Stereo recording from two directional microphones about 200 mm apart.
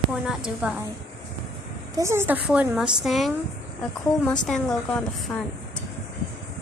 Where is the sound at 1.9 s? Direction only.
15° right (ahead or behind).